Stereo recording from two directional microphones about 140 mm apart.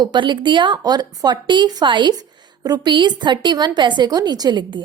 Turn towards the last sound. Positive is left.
turn(degrees=-30)  # may be behind; listen again after turning